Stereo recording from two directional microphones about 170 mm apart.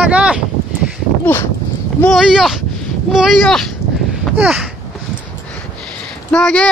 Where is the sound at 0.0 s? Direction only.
5° right (ahead or behind).